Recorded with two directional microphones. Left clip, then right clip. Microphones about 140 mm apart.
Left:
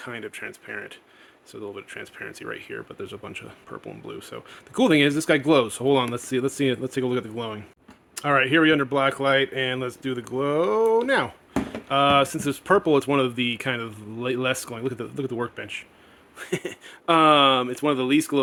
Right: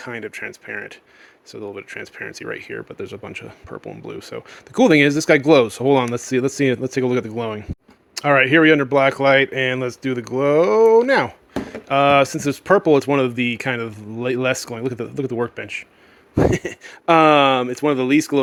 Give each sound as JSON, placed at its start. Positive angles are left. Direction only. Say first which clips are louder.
{"t": 0.0, "sound": "speech", "louder": "right 5 dB", "side_deg": -40}